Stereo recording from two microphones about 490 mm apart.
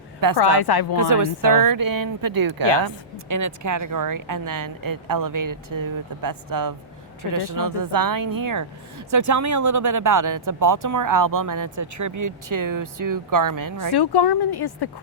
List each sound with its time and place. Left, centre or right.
0.3 s speech: left
0.9 s speech: right
13.9 s speech: left